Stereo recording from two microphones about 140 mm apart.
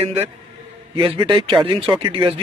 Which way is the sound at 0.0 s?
50° right (ahead or behind).